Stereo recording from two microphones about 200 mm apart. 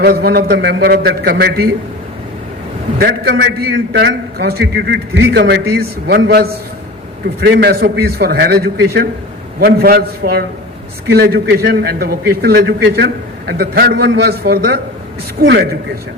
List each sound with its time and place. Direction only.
0.0 s a man's voice: 50° right (ahead or behind)
3.0 s a man's voice: 55° right (ahead or behind)